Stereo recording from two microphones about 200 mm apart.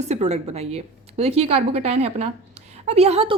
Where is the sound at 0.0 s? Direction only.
35° right (ahead or behind).